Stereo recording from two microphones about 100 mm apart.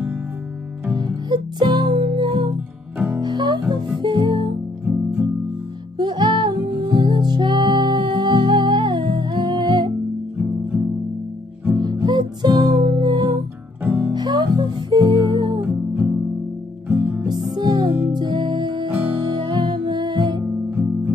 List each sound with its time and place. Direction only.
0.9 s music: 45° right (ahead or behind)
4.8 s music: 10° right (ahead or behind)
5.9 s music: 50° right (ahead or behind)
10.3 s music: 15° right (ahead or behind)
11.7 s music: 40° right (ahead or behind)
15.6 s music: 10° right (ahead or behind)
17.3 s music: 45° right (ahead or behind)
20.4 s music: 10° right (ahead or behind)